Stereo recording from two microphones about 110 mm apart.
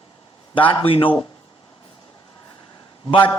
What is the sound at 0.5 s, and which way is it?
Speech, 50° left (ahead or behind).